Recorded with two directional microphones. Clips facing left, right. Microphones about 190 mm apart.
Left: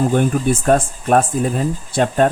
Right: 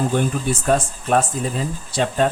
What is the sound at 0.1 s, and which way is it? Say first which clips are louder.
Speech: left 5 dB; 50° left (ahead or behind).